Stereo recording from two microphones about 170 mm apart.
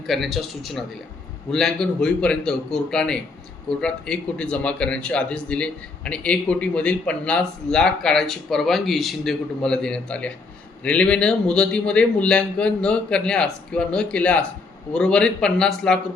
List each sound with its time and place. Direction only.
0.1 s speech: centre (ahead or behind)